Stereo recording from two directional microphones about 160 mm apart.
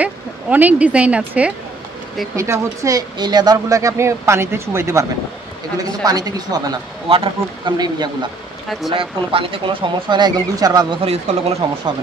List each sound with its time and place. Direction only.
0.0 s speech: 10° right (ahead or behind)
2.3 s speech: 20° right (ahead or behind)
11.0 s speech: 40° right (ahead or behind)